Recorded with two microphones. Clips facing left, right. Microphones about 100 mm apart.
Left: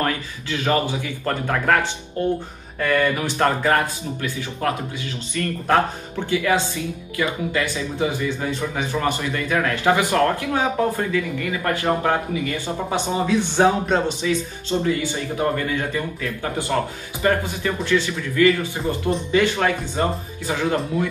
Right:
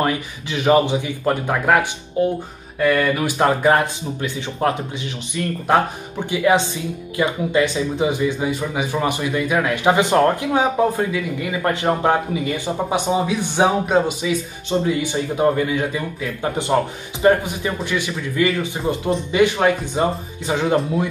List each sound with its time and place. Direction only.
0.0 s speech: 15° right (ahead or behind)
2.8 s speech: 5° right (ahead or behind)
3.3 s speech: 15° right (ahead or behind)